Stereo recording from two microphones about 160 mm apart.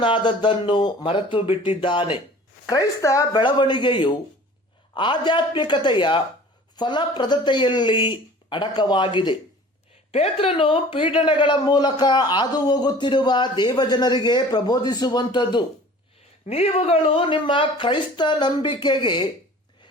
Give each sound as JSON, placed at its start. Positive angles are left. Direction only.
{"t": 0.0, "sound": "speech", "side_deg": 30}
{"t": 10.1, "sound": "speech", "side_deg": 40}
{"t": 16.5, "sound": "speech", "side_deg": 40}